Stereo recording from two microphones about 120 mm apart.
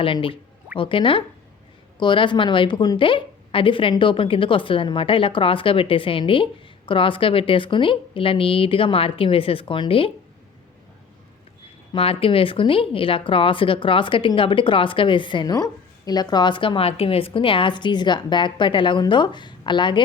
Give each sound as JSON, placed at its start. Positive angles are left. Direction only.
{"t": 0.0, "sound": "a woman's voice", "side_deg": 45}
{"t": 11.9, "sound": "a woman's voice", "side_deg": 50}